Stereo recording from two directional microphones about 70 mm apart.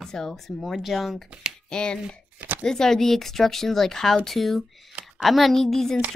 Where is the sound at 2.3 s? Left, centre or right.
Right.